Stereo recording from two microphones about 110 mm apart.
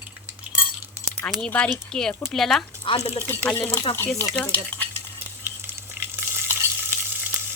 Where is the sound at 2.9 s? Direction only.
60° left (ahead or behind).